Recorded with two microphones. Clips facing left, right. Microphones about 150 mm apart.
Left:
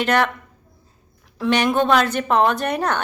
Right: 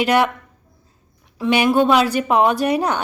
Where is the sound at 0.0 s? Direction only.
10° right (ahead or behind).